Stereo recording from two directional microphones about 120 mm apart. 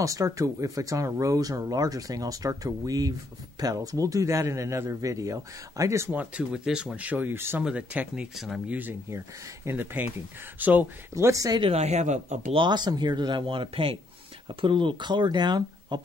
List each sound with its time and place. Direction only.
0.0 s speech: 25° right (ahead or behind)
6.1 s speech: 10° right (ahead or behind)
8.7 s speech: 15° right (ahead or behind)
11.6 s speech: 60° right (ahead or behind)
12.5 s speech: 40° right (ahead or behind)